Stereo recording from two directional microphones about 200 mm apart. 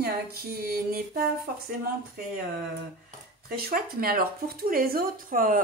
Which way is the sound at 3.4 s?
45° right (ahead or behind).